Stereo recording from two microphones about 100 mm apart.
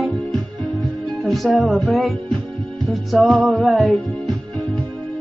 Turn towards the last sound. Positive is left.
turn(degrees=0)  # may be behind; listen again after turning